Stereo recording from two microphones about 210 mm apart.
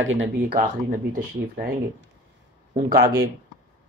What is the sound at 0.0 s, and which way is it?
Speech, 70° right (ahead or behind).